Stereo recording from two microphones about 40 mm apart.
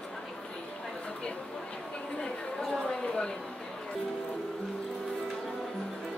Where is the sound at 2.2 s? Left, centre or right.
Centre.